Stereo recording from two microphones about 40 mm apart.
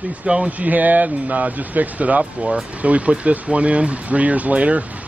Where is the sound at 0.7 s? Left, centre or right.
Right.